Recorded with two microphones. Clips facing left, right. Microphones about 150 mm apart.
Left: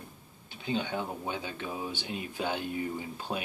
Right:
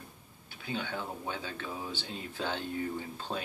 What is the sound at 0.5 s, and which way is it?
Speech, 20° left (ahead or behind).